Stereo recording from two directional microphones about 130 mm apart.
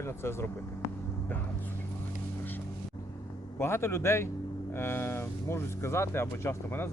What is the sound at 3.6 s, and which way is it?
Speech, 20° left (ahead or behind).